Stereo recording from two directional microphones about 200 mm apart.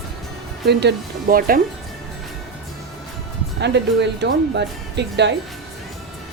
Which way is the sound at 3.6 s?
60° right (ahead or behind).